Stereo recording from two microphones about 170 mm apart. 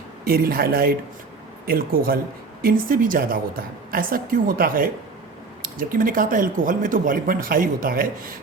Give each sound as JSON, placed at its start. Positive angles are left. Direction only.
{"t": 0.3, "sound": "speech", "side_deg": -60}